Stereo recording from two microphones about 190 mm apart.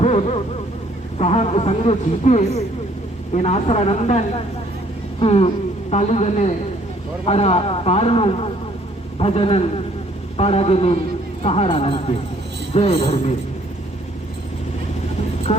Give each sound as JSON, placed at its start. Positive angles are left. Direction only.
{"t": 0.0, "sound": "a sound", "side_deg": 35}
{"t": 1.2, "sound": "speech", "side_deg": 35}
{"t": 5.2, "sound": "speech", "side_deg": 30}
{"t": 15.5, "sound": "speech", "side_deg": 35}